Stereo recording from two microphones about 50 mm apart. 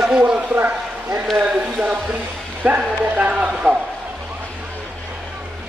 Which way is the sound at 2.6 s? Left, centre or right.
Right.